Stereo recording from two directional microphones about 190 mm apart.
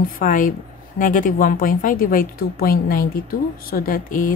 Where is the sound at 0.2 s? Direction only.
45° left (ahead or behind).